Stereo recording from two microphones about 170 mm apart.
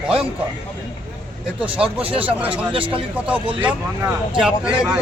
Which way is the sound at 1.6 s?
35° right (ahead or behind).